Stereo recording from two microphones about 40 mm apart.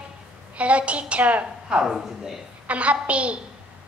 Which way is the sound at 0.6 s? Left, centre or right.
Right.